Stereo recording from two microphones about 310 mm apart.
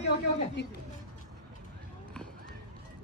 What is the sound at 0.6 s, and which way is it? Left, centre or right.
Speech, left.